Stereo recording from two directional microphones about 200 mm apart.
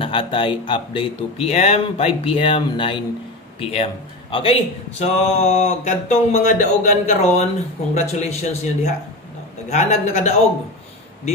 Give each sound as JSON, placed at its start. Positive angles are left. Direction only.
{"t": 0.0, "sound": "a man's voice", "side_deg": 25}